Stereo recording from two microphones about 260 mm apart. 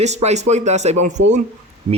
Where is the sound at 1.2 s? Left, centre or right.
Right.